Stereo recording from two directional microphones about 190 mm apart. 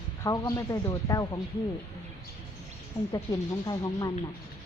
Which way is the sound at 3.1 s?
20° left (ahead or behind).